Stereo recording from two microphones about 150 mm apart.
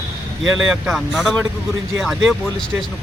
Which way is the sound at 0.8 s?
5° right (ahead or behind).